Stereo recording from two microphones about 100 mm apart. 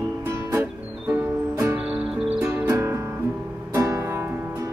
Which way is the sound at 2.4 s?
25° right (ahead or behind).